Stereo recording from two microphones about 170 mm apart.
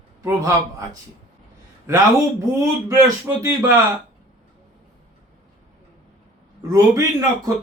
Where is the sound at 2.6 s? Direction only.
15° right (ahead or behind).